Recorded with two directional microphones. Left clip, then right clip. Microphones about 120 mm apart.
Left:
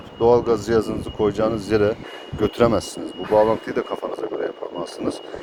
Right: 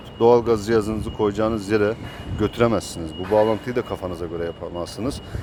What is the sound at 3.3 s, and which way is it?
Speech, 35° right (ahead or behind).